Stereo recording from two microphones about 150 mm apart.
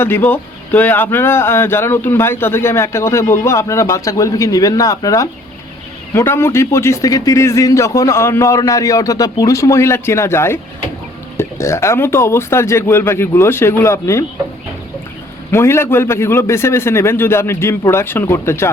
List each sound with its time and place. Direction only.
0.0 s speech: 15° left (ahead or behind)
15.5 s speech: 15° left (ahead or behind)